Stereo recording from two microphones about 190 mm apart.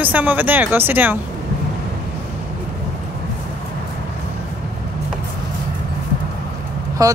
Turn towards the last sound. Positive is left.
turn(degrees=-20)  # may be behind; listen again after turning